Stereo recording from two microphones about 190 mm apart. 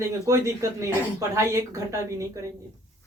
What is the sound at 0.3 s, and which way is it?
Speech, 15° right (ahead or behind).